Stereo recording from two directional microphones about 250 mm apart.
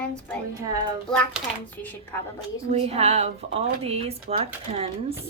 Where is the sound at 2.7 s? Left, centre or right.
Right.